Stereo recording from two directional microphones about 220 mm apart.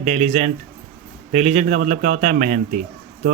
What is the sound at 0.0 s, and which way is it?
A man's voice, 30° right (ahead or behind).